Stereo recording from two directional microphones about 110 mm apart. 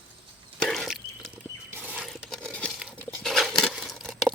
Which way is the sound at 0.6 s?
5° left (ahead or behind).